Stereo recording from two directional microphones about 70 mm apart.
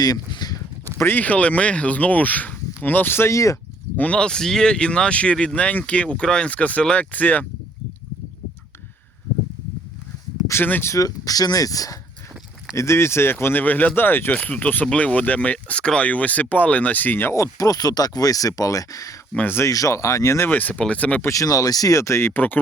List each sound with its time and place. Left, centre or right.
0.0 s speech: left
0.9 s speech: left
3.9 s speech: centre
10.5 s speech: left
10.9 s speech: left
12.7 s speech: left
14.3 s speech: centre
17.6 s speech: left
20.5 s speech: left
21.2 s speech: left
22.3 s speech: left